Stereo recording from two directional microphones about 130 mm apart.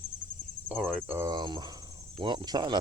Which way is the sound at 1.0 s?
20° right (ahead or behind).